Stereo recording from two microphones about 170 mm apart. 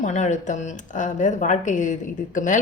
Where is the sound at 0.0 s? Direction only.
45° left (ahead or behind).